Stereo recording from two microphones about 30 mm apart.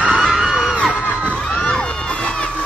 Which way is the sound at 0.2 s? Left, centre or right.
Centre.